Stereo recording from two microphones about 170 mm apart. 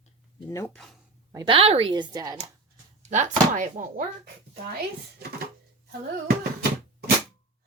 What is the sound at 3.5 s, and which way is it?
Speech, 50° right (ahead or behind).